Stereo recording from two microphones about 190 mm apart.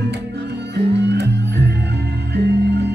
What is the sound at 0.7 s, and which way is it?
Music, 60° right (ahead or behind).